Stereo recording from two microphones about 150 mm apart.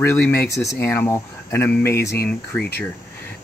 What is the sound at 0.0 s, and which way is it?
Speech, 15° left (ahead or behind).